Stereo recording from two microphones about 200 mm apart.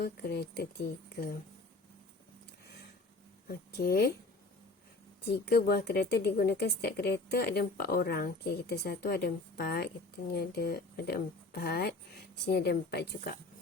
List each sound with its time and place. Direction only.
0.0 s a woman's voice: 50° left (ahead or behind)
3.5 s a woman's voice: 45° left (ahead or behind)
5.3 s a woman's voice: 50° left (ahead or behind)